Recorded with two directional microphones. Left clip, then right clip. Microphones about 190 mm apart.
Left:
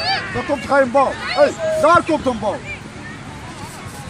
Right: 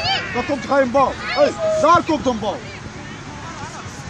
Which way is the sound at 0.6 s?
45° right (ahead or behind).